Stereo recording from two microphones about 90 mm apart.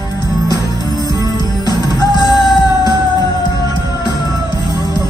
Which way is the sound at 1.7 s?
50° left (ahead or behind).